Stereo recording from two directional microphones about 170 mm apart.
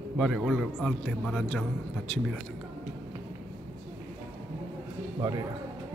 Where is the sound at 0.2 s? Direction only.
Centre (ahead or behind).